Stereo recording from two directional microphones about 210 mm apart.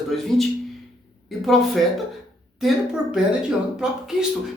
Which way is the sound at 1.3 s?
Centre (ahead or behind).